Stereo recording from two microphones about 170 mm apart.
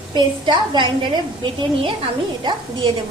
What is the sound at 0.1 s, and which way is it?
A woman's voice, 25° right (ahead or behind).